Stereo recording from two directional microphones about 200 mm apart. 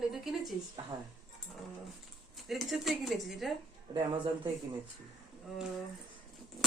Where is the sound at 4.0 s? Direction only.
25° right (ahead or behind).